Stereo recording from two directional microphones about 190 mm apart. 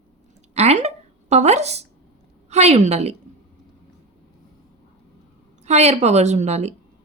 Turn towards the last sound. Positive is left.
turn(degrees=-35)  # may be behind; listen again after turning